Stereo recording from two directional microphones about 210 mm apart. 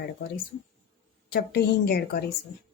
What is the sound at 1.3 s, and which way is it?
Speech, 50° left (ahead or behind).